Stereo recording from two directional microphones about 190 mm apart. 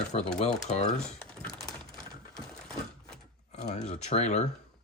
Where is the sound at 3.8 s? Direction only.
35° left (ahead or behind).